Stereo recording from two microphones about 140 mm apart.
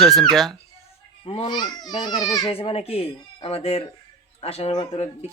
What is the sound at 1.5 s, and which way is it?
A child's voice, 30° left (ahead or behind).